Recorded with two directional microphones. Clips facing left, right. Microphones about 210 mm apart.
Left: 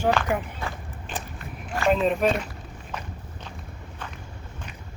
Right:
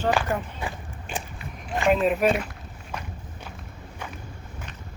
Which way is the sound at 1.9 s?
5° right (ahead or behind).